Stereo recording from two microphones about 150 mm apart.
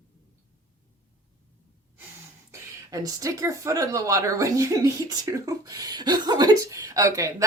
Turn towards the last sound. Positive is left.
turn(degrees=-20)  # may be behind; listen again after turning